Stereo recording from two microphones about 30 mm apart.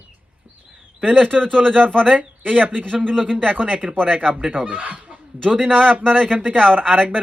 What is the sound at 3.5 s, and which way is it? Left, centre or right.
Speech, right.